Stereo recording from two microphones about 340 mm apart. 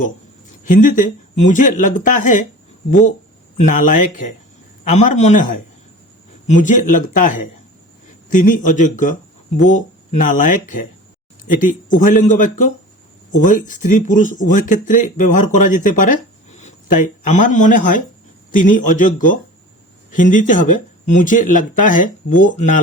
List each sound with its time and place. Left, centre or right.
0.6 s speech: left
3.6 s a man's voice: left
8.5 s speech: left
15.9 s a sound: left
17.4 s speech: left